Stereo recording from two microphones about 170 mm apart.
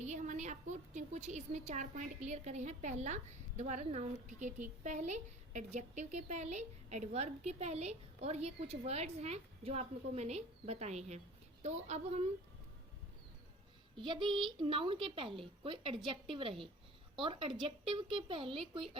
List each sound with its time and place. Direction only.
0.0 s a woman's voice: 45° right (ahead or behind)
13.9 s a child's voice: 30° right (ahead or behind)